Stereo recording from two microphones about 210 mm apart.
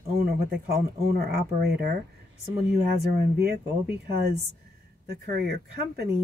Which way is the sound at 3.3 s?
50° right (ahead or behind).